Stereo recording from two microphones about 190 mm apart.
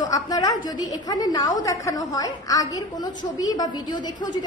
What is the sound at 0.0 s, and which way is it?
A woman's voice, 20° left (ahead or behind).